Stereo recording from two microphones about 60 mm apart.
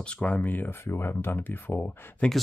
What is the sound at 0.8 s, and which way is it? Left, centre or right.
Speech, left.